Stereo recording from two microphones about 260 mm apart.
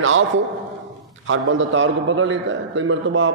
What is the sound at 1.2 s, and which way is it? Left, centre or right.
A man's voice, right.